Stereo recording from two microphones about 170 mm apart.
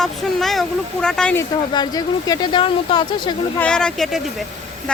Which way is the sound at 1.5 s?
25° left (ahead or behind).